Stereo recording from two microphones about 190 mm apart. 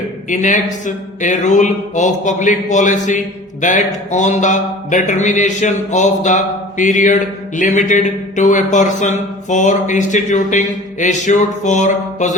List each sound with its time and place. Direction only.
0.3 s speech: 40° left (ahead or behind)